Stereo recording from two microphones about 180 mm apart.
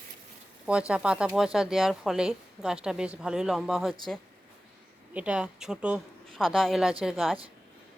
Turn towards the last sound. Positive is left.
turn(degrees=0)  # may be behind; listen again after turning